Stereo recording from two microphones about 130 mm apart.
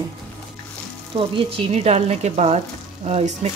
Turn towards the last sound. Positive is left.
turn(degrees=-55)  # may be behind; listen again after turning